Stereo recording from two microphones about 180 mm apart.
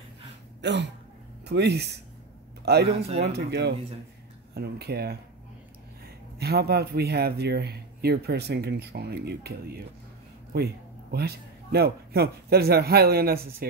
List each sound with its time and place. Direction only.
0.6 s a man's voice: 70° right (ahead or behind)